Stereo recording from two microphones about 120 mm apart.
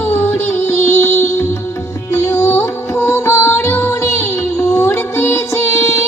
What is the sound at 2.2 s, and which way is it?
Music, 20° left (ahead or behind).